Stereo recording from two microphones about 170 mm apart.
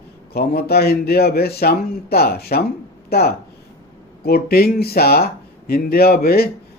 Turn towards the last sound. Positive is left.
turn(degrees=65)  # may be behind; listen again after turning